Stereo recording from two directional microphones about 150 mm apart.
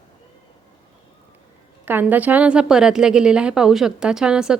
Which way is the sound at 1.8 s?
10° right (ahead or behind).